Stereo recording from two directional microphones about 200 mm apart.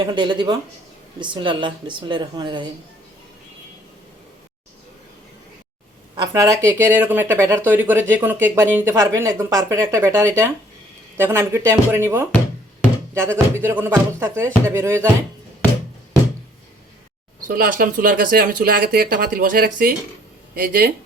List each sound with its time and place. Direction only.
0.0 s speech: 20° right (ahead or behind)
6.1 s speech: 15° right (ahead or behind)
17.5 s speech: 45° right (ahead or behind)